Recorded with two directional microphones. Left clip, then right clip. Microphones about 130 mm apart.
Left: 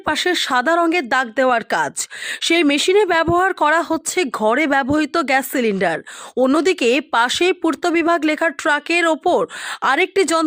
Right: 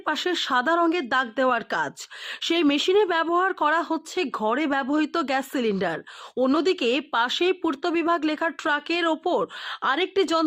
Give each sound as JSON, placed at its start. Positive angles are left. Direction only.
{"t": 0.0, "sound": "speech", "side_deg": 30}